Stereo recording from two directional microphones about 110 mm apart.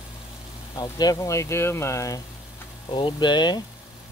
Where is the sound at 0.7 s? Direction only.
40° left (ahead or behind).